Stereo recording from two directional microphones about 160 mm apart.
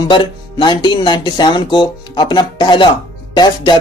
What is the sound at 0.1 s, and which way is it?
Speech, 30° left (ahead or behind).